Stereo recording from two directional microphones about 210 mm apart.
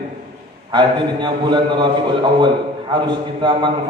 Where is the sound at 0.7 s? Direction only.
20° right (ahead or behind).